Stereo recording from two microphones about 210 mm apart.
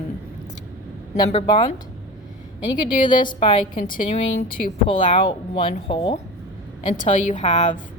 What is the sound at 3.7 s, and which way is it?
Speech, 40° left (ahead or behind).